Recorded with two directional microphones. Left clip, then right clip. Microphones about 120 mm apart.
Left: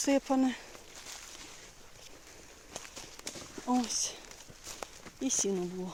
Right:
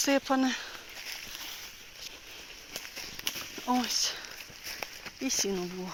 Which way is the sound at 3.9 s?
25° left (ahead or behind).